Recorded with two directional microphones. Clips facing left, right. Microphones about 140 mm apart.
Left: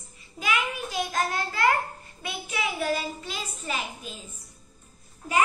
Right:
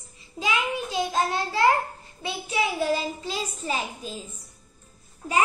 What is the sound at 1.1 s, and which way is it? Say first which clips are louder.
A child's voice: right 4 dB; 25° right (ahead or behind).